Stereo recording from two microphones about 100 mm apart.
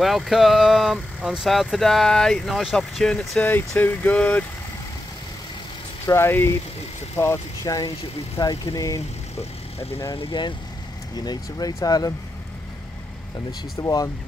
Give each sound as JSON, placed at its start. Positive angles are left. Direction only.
{"t": 0.0, "sound": "speech", "side_deg": 0}
{"t": 3.4, "sound": "speech", "side_deg": 20}
{"t": 6.0, "sound": "speech", "side_deg": 25}
{"t": 10.1, "sound": "speech", "side_deg": 50}
{"t": 11.1, "sound": "speech", "side_deg": 40}
{"t": 13.5, "sound": "speech", "side_deg": 40}